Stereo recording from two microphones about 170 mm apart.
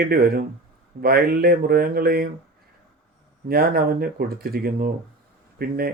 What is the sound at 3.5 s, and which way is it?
Speech, 65° right (ahead or behind).